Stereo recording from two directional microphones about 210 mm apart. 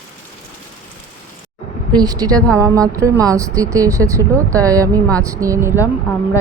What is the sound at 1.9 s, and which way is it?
Speech, 15° right (ahead or behind).